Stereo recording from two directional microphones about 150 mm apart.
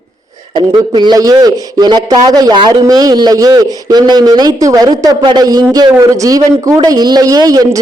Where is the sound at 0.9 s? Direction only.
30° right (ahead or behind).